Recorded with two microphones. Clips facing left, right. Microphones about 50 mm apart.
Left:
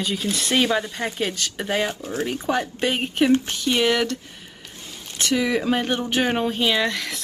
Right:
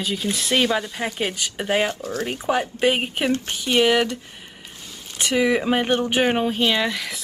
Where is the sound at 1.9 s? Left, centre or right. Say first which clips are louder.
Even; left.